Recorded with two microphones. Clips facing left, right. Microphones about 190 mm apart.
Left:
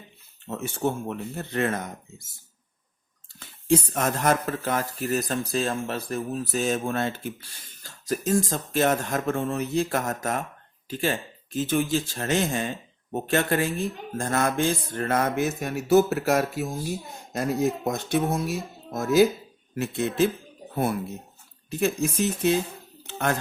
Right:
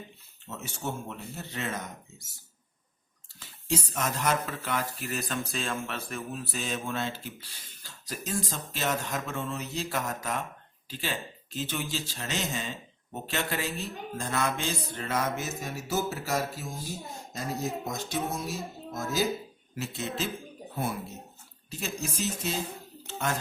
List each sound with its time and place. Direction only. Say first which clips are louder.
0.4 s speech: left 9 dB; 55° left (ahead or behind)
3.4 s speech: left 9 dB; 55° left (ahead or behind)
19.7 s speech: left 8 dB; 55° left (ahead or behind)
21.7 s speech: left 11 dB; 55° left (ahead or behind)